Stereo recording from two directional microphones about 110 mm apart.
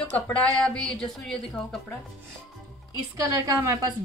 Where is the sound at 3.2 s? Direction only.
30° right (ahead or behind).